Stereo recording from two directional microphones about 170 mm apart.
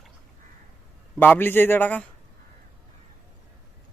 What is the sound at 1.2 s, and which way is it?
Speech, 10° left (ahead or behind).